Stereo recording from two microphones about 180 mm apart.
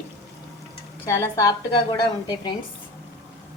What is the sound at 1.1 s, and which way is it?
A woman's voice, 15° left (ahead or behind).